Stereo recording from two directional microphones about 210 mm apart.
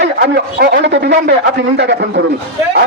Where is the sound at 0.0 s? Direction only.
50° right (ahead or behind).